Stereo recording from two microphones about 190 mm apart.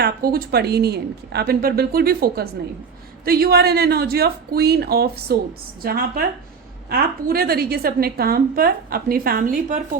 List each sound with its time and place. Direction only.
0.0 s a woman's voice: 50° right (ahead or behind)